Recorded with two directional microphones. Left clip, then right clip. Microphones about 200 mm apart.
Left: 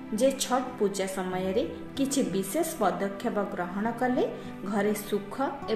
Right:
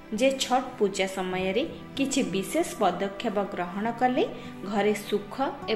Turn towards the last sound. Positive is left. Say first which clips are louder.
# right 2 dB
turn(degrees=-20)  # may be behind; listen again after turning